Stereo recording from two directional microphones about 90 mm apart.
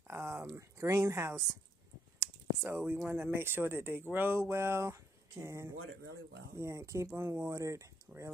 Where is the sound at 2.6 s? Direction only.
20° right (ahead or behind).